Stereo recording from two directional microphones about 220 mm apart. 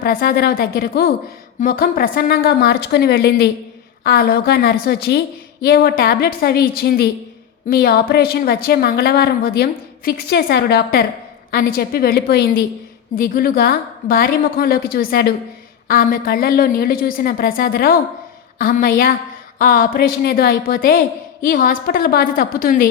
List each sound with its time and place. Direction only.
0.0 s a woman's voice: 45° left (ahead or behind)